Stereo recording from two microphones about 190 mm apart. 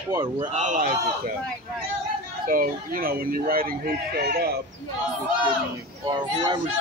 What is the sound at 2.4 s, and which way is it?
Speech, 50° right (ahead or behind).